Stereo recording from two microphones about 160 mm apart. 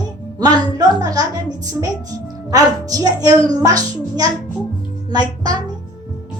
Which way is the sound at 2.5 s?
20° right (ahead or behind).